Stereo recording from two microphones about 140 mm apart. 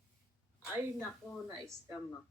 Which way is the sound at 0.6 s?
15° right (ahead or behind).